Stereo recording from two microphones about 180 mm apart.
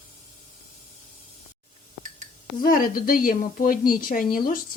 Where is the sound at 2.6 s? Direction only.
50° left (ahead or behind).